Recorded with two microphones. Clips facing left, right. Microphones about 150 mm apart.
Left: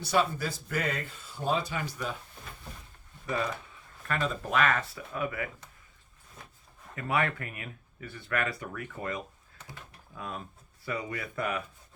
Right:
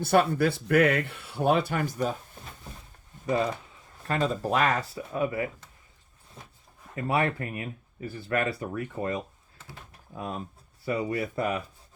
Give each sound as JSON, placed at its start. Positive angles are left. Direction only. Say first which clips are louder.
{"t": 0.0, "sound": "speech", "louder": "right 6 dB", "side_deg": -55}
{"t": 3.2, "sound": "speech", "louder": "right 5 dB", "side_deg": -25}
{"t": 6.9, "sound": "speech", "louder": "right 3 dB", "side_deg": -30}